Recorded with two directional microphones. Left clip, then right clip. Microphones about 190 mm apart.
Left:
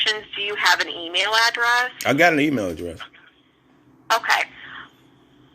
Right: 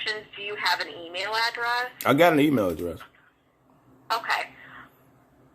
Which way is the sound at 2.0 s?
10° right (ahead or behind).